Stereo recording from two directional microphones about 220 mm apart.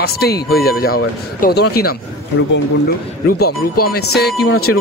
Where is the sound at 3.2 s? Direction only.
45° left (ahead or behind).